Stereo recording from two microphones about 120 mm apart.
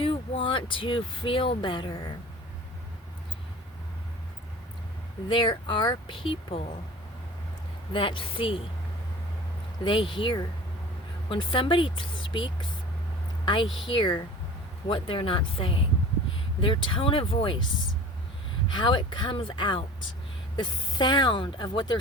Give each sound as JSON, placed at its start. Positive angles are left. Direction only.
{"t": 0.0, "sound": "speech", "side_deg": 50}
{"t": 5.3, "sound": "speech", "side_deg": 40}
{"t": 7.9, "sound": "speech", "side_deg": 45}
{"t": 9.8, "sound": "speech", "side_deg": 40}
{"t": 18.7, "sound": "speech", "side_deg": 40}